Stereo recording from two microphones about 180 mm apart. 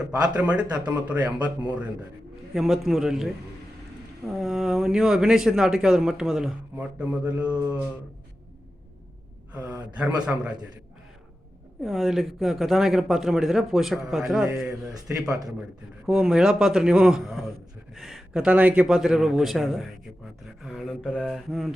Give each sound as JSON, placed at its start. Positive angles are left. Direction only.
{"t": 0.3, "sound": "speech", "side_deg": -5}
{"t": 2.6, "sound": "speech", "side_deg": 0}
{"t": 9.5, "sound": "speech", "side_deg": -5}
{"t": 11.8, "sound": "speech", "side_deg": 0}
{"t": 15.3, "sound": "a man's voice", "side_deg": -20}
{"t": 16.0, "sound": "a man's voice", "side_deg": 0}